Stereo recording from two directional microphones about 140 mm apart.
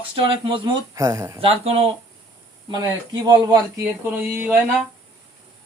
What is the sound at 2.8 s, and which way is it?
Speech, 30° right (ahead or behind).